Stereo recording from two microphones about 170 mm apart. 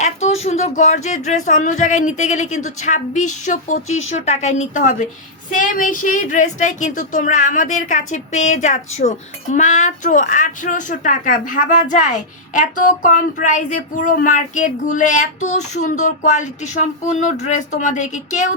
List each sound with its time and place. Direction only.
0.0 s speech: 40° left (ahead or behind)